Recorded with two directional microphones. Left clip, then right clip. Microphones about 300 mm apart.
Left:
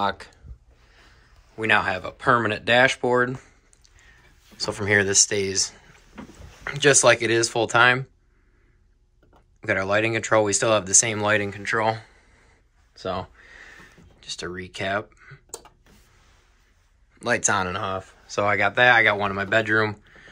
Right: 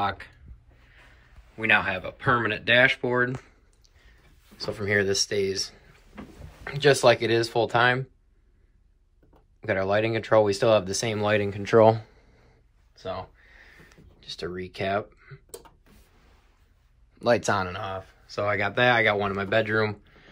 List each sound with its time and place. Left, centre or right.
0.0 s speech: centre
1.6 s speech: centre
4.6 s speech: centre
6.6 s speech: centre
9.6 s speech: centre
12.9 s a sound: centre
14.3 s speech: centre
17.2 s speech: centre